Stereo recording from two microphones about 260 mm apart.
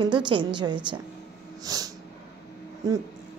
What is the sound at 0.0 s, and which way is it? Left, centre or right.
A woman's voice, centre.